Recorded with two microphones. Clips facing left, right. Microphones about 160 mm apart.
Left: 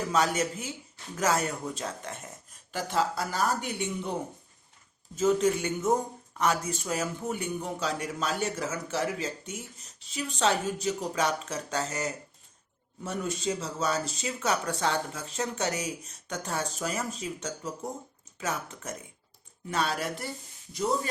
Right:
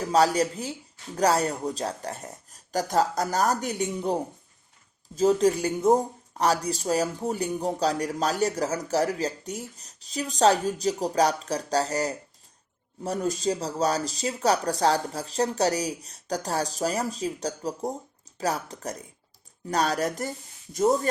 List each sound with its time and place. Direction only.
0.1 s speech: 35° right (ahead or behind)